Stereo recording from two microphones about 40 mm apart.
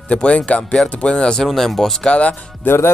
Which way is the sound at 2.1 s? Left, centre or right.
Left.